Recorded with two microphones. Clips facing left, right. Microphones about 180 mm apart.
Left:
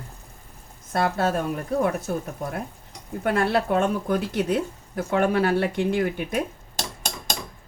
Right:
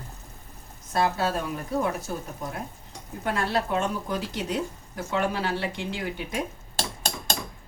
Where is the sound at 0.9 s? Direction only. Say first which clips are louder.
Left 2 dB; 55° left (ahead or behind).